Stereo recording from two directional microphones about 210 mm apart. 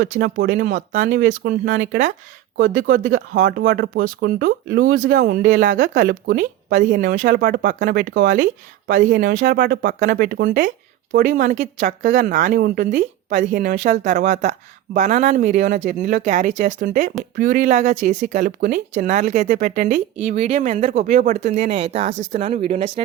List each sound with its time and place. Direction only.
0.0 s speech: 40° right (ahead or behind)
8.9 s speech: 40° right (ahead or behind)